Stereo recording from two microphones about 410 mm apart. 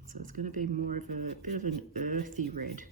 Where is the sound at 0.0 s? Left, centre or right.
Centre.